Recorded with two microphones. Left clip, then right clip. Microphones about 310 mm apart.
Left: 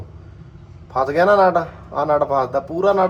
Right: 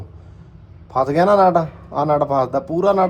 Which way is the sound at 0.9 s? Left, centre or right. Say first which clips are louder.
Even; right.